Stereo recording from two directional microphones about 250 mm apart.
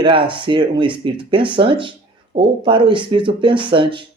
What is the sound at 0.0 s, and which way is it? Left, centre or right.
Speech, centre.